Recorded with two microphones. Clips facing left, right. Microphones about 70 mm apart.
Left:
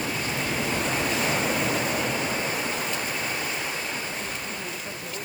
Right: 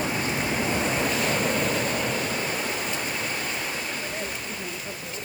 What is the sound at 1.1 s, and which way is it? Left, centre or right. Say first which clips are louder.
Waves: right 1 dB; centre.